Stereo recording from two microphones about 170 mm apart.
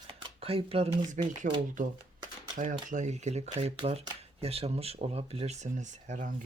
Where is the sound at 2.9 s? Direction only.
45° right (ahead or behind).